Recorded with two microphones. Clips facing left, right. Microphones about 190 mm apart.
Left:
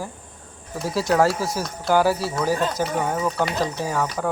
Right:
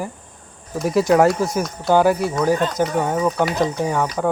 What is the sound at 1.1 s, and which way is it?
Speech, 15° right (ahead or behind).